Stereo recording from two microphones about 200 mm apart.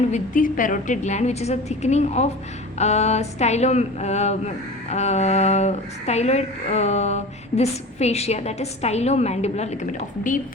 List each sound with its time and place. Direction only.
0.1 s speech: 40° left (ahead or behind)